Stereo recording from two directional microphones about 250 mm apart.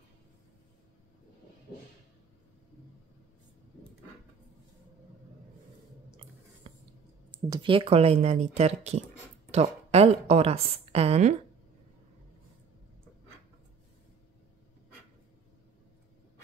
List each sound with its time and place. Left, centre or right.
7.2 s a woman's voice: centre